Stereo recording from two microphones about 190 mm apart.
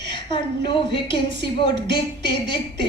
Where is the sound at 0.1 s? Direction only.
25° left (ahead or behind).